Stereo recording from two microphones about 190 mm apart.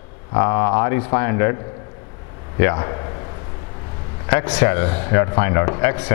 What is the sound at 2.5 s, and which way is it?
Speech, 20° left (ahead or behind).